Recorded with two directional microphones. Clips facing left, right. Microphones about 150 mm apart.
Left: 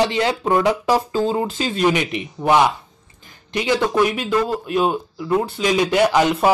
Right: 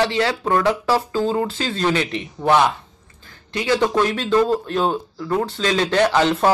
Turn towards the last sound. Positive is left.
turn(degrees=10)  # may be behind; listen again after turning